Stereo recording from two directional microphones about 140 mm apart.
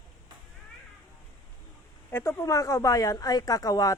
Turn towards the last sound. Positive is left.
turn(degrees=25)  # may be behind; listen again after turning